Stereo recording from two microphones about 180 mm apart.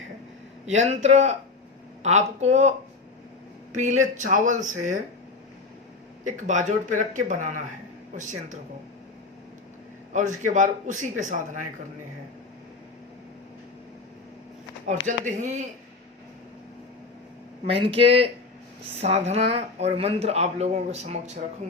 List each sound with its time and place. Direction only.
0.7 s speech: 40° right (ahead or behind)
3.8 s a man's voice: 40° right (ahead or behind)
6.2 s a man's voice: 45° right (ahead or behind)
10.1 s a man's voice: 45° right (ahead or behind)
14.8 s speech: 40° right (ahead or behind)
17.7 s speech: 30° right (ahead or behind)